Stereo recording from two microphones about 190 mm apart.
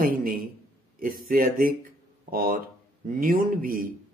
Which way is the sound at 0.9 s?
50° right (ahead or behind).